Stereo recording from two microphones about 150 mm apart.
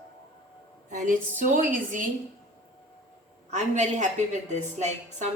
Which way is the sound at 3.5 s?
50° right (ahead or behind).